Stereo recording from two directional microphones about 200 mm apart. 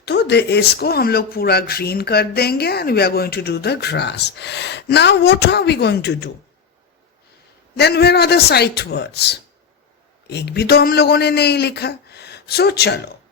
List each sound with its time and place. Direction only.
0.0 s speech: 55° left (ahead or behind)
7.8 s speech: 55° left (ahead or behind)